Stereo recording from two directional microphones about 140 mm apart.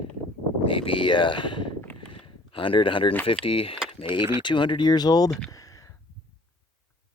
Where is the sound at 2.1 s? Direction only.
35° left (ahead or behind).